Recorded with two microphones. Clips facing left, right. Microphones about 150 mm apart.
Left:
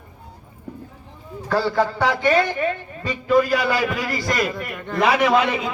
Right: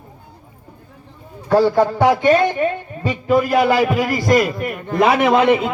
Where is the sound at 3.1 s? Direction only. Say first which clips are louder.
Right 2 dB; 50° right (ahead or behind).